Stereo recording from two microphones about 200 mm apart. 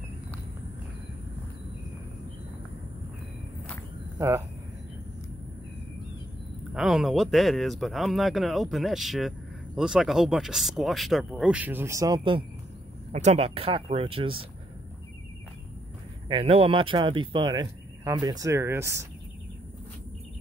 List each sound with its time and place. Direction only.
4.2 s speech: 15° right (ahead or behind)
6.7 s speech: centre (ahead or behind); by 12.4 s 20° right (ahead or behind)
13.1 s speech: 35° right (ahead or behind)
16.3 s speech: 30° right (ahead or behind)